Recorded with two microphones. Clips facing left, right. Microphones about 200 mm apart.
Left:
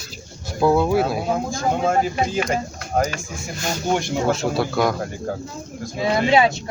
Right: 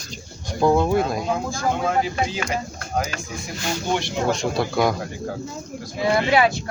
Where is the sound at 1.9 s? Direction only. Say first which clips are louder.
Left 2 dB; 50° left (ahead or behind).